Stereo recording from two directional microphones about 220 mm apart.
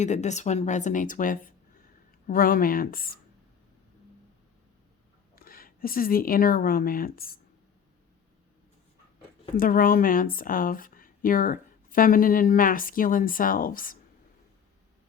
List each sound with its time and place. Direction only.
0.0 s speech: 30° left (ahead or behind)
5.3 s a woman's voice: 40° left (ahead or behind)
9.6 s speech: 40° left (ahead or behind)